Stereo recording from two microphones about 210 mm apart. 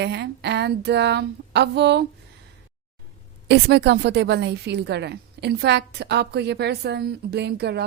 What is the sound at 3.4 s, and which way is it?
A woman's voice, 50° right (ahead or behind).